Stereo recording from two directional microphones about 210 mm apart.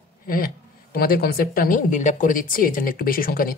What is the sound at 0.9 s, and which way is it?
A woman's voice, 45° left (ahead or behind).